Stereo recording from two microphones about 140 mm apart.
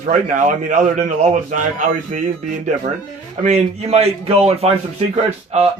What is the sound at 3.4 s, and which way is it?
A man's voice, 50° right (ahead or behind).